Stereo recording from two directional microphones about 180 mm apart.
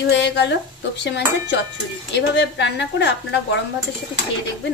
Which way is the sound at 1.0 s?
70° left (ahead or behind).